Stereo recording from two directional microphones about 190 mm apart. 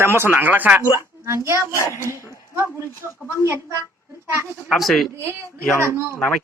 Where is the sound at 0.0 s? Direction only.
10° right (ahead or behind).